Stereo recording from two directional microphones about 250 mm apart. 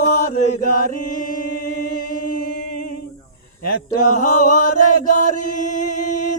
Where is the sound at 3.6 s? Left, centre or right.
Left.